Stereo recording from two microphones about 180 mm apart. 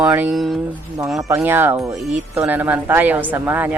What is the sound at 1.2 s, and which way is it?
Speech, 15° right (ahead or behind).